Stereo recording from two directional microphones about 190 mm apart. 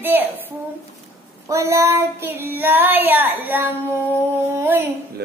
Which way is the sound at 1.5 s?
15° right (ahead or behind).